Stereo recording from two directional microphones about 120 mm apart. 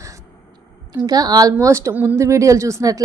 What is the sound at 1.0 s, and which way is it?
Speech, 35° right (ahead or behind).